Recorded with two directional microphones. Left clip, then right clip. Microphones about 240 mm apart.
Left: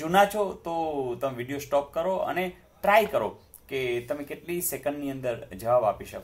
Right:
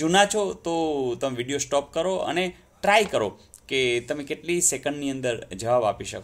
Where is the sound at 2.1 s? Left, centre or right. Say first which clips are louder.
Right 2 dB; right.